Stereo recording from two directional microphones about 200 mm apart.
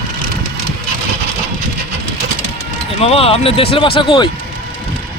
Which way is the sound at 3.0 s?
30° left (ahead or behind).